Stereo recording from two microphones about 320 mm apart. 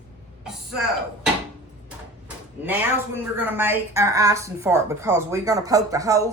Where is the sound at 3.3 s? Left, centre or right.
Centre.